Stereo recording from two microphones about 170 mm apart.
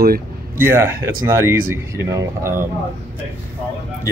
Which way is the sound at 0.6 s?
15° right (ahead or behind).